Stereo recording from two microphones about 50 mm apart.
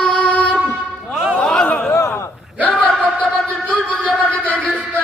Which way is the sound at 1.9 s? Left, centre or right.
Left.